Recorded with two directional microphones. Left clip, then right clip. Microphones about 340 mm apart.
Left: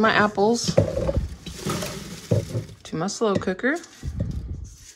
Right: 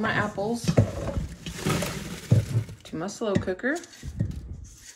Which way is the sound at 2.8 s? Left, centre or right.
Centre.